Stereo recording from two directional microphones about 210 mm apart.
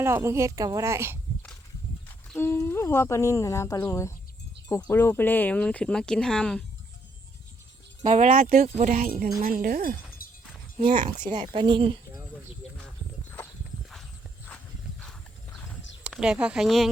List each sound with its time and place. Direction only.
0.0 s a woman's voice: 10° right (ahead or behind)
2.4 s speech: 10° left (ahead or behind)
8.0 s speech: 35° right (ahead or behind)
10.2 s a sound: 45° left (ahead or behind)
10.8 s a woman's voice: 25° right (ahead or behind)
16.0 s speech: 5° right (ahead or behind)